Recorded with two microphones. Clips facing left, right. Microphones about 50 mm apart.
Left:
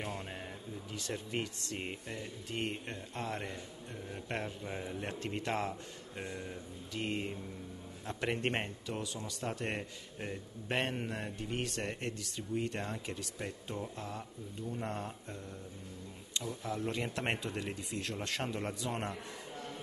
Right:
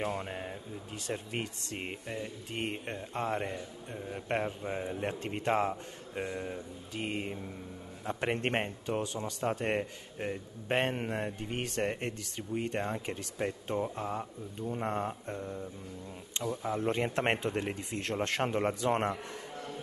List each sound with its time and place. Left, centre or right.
0.1 s speech: right
1.8 s speech: centre
4.9 s speech: right
8.8 s speech: right
9.5 s speech: right